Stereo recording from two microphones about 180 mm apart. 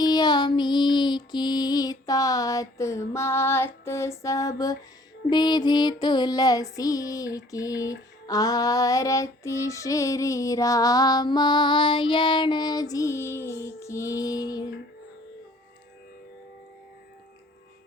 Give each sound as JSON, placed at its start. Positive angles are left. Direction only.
{"t": 0.0, "sound": "music", "side_deg": 20}
{"t": 3.8, "sound": "female singing", "side_deg": 15}
{"t": 5.3, "sound": "music", "side_deg": 25}